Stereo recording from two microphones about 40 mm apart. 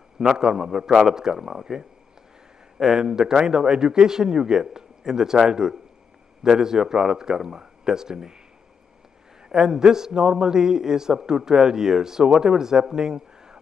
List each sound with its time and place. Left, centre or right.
0.2 s a man's voice: centre
2.8 s a man's voice: centre
9.5 s a man's voice: centre